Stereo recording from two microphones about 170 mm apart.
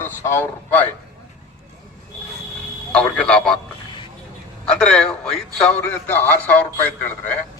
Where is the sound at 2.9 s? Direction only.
5° left (ahead or behind).